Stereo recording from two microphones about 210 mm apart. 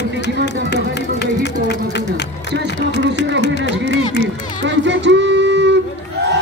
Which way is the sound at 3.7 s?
55° right (ahead or behind).